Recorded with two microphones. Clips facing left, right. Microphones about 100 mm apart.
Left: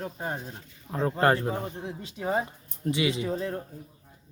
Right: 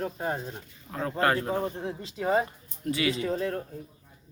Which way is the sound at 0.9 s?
25° left (ahead or behind).